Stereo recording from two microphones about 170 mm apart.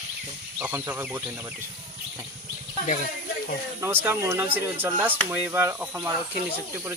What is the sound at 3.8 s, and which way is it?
Speech, 10° right (ahead or behind).